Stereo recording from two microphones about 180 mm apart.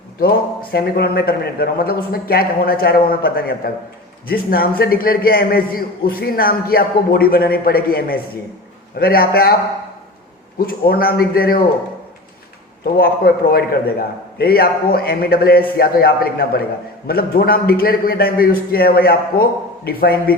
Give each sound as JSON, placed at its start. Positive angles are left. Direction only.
{"t": 0.2, "sound": "a man's voice", "side_deg": 60}
{"t": 10.7, "sound": "a man's voice", "side_deg": 55}
{"t": 12.8, "sound": "a man's voice", "side_deg": 60}